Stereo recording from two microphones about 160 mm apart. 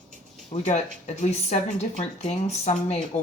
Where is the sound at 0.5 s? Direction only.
50° left (ahead or behind).